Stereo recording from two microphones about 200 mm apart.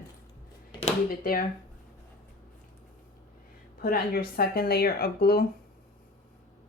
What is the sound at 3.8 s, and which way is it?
Speech, 45° left (ahead or behind).